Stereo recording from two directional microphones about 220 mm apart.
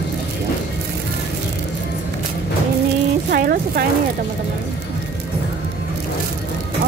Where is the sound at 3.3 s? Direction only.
45° right (ahead or behind).